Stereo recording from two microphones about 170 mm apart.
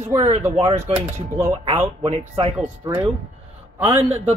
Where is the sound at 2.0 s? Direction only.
35° right (ahead or behind).